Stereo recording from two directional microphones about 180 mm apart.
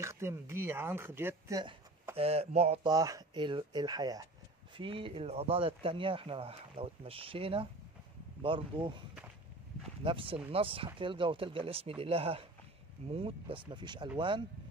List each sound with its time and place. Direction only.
0.0 s speech: 15° right (ahead or behind)
2.1 s speech: 35° right (ahead or behind)
2.9 s speech: 20° right (ahead or behind)
10.0 s speech: 30° right (ahead or behind)